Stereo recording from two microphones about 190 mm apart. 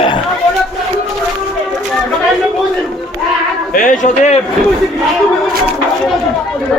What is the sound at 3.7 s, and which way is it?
Speech, 45° left (ahead or behind).